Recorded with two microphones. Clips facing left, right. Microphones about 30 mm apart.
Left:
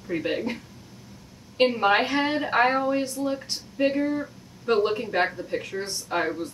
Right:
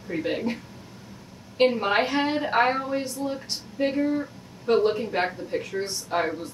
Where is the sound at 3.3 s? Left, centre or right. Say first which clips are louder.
Left 1 dB; centre.